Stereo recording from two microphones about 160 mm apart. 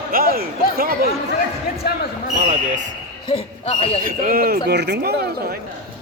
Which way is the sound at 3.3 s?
35° left (ahead or behind).